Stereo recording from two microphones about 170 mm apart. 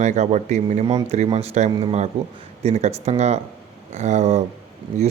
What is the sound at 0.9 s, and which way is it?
Speech, 30° right (ahead or behind).